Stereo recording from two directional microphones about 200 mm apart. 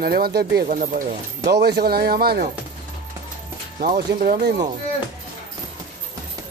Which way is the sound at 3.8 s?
40° right (ahead or behind).